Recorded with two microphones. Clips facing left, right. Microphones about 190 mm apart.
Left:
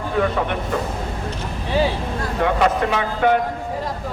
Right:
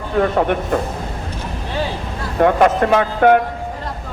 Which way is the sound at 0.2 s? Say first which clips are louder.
Right 5 dB; 50° right (ahead or behind).